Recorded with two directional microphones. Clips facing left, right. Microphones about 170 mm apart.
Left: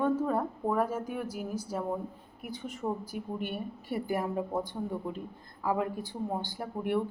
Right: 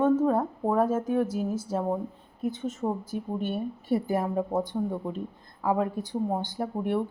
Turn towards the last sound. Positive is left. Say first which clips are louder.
# right 3 dB
turn(degrees=-25)  # may be behind; listen again after turning